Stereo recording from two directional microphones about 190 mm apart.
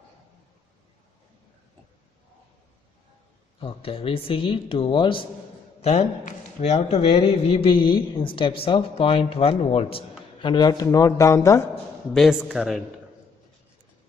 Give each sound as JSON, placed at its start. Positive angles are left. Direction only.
{"t": 3.6, "sound": "a man's voice", "side_deg": 30}
{"t": 12.1, "sound": "speech", "side_deg": 0}